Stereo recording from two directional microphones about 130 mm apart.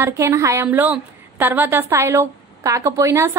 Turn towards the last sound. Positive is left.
turn(degrees=-20)  # may be behind; listen again after turning